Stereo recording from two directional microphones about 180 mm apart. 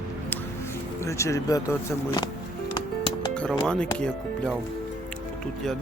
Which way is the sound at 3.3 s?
5° left (ahead or behind).